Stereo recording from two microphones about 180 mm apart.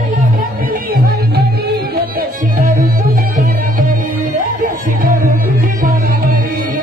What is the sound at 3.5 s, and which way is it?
Music, 50° right (ahead or behind).